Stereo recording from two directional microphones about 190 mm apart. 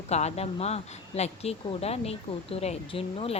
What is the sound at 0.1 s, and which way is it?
Speech, 35° left (ahead or behind).